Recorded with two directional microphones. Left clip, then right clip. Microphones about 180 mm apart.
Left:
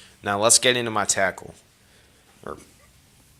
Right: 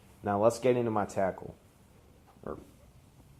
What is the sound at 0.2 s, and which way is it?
Speech, 25° left (ahead or behind).